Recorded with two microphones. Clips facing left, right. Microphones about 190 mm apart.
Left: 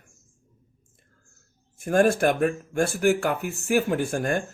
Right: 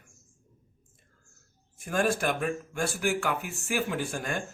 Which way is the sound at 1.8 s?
45° left (ahead or behind).